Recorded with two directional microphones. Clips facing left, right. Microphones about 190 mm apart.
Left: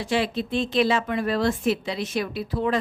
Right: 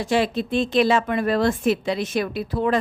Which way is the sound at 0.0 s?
45° right (ahead or behind).